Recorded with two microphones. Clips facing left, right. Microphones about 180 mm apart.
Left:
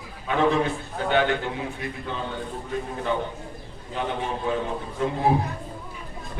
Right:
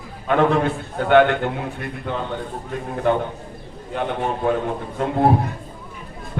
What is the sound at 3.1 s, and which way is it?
A man's voice, 55° right (ahead or behind).